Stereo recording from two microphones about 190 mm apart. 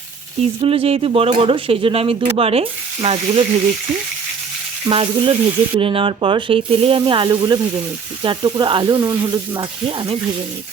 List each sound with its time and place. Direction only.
0.6 s speech: 30° right (ahead or behind)
4.9 s speech: 25° right (ahead or behind)